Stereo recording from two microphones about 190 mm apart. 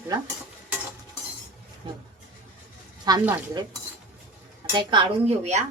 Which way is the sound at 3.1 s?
20° right (ahead or behind).